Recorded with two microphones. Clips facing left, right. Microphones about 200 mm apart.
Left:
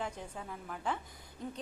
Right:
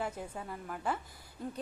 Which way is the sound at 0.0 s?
5° right (ahead or behind).